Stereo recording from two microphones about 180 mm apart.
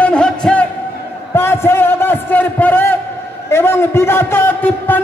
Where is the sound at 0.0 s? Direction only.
5° left (ahead or behind).